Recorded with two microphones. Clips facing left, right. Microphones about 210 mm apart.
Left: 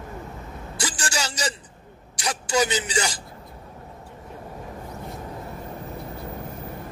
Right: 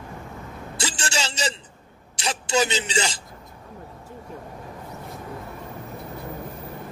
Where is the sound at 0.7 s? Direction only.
25° right (ahead or behind).